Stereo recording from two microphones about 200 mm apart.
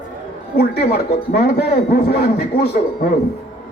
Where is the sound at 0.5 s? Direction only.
50° left (ahead or behind).